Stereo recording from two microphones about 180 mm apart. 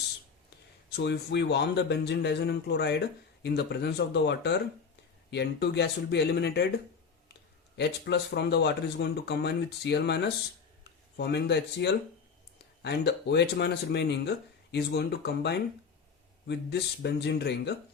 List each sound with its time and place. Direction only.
0.9 s speech: 70° left (ahead or behind)
7.8 s speech: 70° left (ahead or behind)